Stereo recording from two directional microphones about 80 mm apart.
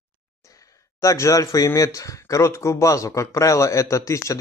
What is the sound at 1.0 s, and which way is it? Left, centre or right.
Speech, left.